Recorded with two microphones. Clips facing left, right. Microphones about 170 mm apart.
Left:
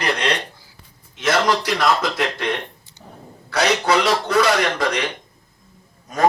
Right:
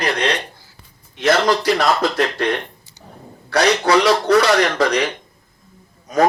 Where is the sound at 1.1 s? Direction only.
65° right (ahead or behind).